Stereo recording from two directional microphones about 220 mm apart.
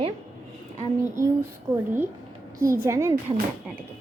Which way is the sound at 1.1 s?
10° right (ahead or behind).